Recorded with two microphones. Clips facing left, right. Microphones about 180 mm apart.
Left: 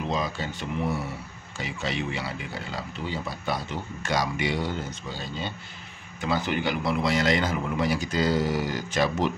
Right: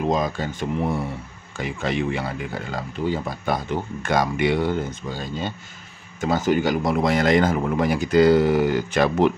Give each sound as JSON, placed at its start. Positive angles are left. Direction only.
{"t": 0.0, "sound": "speech", "side_deg": -50}